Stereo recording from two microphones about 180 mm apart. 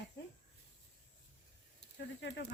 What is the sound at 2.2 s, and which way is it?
Speech, 75° left (ahead or behind).